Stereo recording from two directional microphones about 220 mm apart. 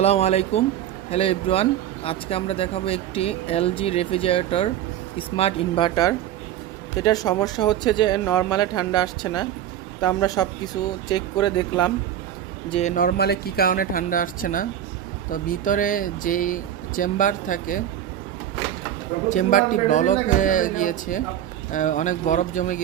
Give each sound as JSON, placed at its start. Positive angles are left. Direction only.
{"t": 0.0, "sound": "speech", "side_deg": 30}
{"t": 12.7, "sound": "speech", "side_deg": 35}
{"t": 19.3, "sound": "speech", "side_deg": 35}